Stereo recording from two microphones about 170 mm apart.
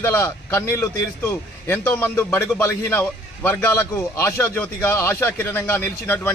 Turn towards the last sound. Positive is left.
turn(degrees=10)  # may be behind; listen again after turning